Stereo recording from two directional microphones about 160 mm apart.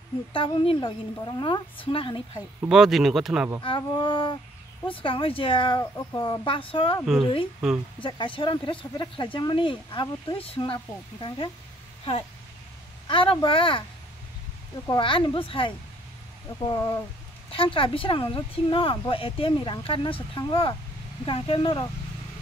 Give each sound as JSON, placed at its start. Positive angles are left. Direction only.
{"t": 0.3, "sound": "speech", "side_deg": 35}
{"t": 2.7, "sound": "speech", "side_deg": -5}
{"t": 3.6, "sound": "speech", "side_deg": 30}
{"t": 7.6, "sound": "speech", "side_deg": -5}
{"t": 8.0, "sound": "speech", "side_deg": 30}
{"t": 15.0, "sound": "speech", "side_deg": 30}